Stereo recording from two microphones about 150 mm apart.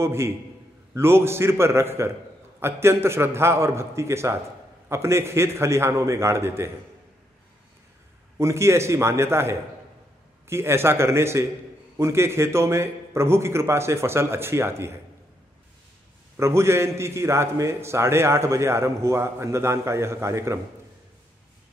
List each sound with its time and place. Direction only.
0.0 s a man's voice: 15° right (ahead or behind)
8.4 s a man's voice: 20° right (ahead or behind)
16.3 s a man's voice: 20° right (ahead or behind)